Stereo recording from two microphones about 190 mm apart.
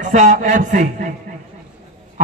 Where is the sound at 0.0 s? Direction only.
40° right (ahead or behind).